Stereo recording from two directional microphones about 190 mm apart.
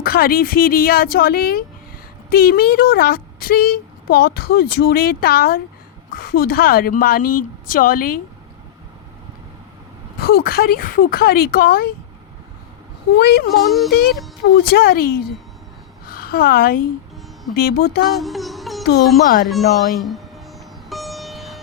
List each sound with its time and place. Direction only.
0.0 s speech: 50° left (ahead or behind)
10.2 s speech: 50° left (ahead or behind)
13.1 s speech: 55° left (ahead or behind)
13.5 s music: centre (ahead or behind)
14.7 s a woman's voice: 55° left (ahead or behind)
18.2 s music: centre (ahead or behind)
19.2 s speech: 50° left (ahead or behind)
19.5 s speech: centre (ahead or behind)
20.9 s music: centre (ahead or behind)